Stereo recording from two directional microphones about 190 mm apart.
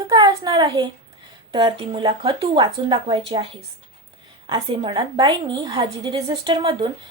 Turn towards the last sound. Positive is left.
turn(degrees=-25)  # may be behind; listen again after turning